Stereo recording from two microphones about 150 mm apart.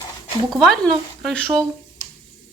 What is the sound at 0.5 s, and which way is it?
Speech, centre (ahead or behind).